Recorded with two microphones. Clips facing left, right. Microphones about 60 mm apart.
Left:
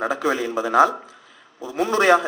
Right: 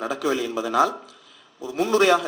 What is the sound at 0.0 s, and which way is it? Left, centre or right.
A man's voice, left.